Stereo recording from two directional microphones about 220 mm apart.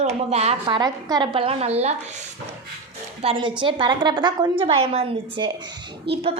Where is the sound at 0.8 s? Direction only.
20° right (ahead or behind).